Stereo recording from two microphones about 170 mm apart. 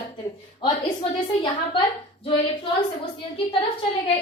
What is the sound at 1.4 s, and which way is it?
A woman's voice, 30° left (ahead or behind).